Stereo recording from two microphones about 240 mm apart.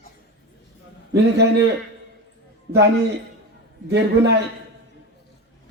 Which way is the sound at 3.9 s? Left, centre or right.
Right.